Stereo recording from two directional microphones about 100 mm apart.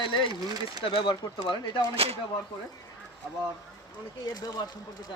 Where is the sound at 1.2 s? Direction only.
45° left (ahead or behind).